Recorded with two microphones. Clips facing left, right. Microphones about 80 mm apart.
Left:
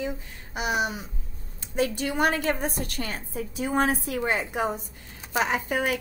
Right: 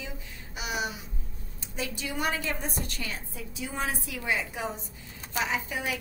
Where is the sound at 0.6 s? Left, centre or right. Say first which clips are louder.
Left 6 dB; left.